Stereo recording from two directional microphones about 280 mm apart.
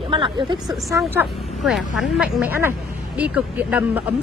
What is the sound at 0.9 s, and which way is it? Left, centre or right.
A woman's voice, centre.